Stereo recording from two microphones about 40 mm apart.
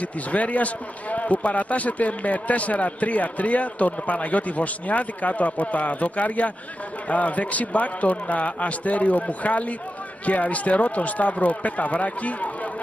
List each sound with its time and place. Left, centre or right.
0.0 s speech: left